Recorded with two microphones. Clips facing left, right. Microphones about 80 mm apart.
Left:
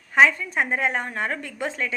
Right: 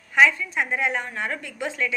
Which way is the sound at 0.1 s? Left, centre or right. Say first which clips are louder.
Left 1 dB; left.